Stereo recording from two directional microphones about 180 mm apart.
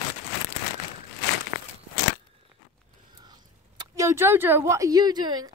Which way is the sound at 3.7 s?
20° right (ahead or behind).